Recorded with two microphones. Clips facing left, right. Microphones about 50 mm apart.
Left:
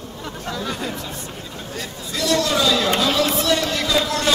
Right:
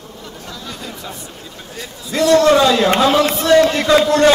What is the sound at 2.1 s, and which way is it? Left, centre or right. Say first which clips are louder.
A man's voice: right 9 dB; right.